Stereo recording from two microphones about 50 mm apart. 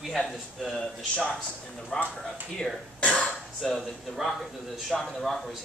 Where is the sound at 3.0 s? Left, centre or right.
Left.